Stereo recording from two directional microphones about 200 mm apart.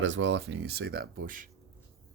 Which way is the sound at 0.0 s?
70° right (ahead or behind).